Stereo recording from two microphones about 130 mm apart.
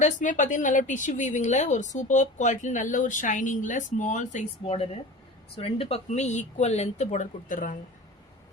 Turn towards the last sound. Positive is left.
turn(degrees=90)